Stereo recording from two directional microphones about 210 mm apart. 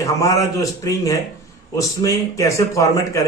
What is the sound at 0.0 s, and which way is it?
A man's voice, 15° left (ahead or behind).